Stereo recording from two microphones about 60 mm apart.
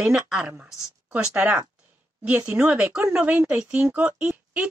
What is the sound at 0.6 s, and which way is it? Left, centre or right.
Speech, centre.